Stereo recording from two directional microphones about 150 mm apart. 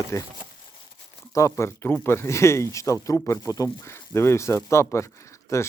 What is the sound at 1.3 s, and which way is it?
Speech, 20° left (ahead or behind).